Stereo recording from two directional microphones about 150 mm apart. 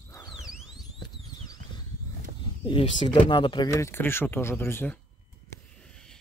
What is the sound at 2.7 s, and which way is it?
Speech, 35° left (ahead or behind).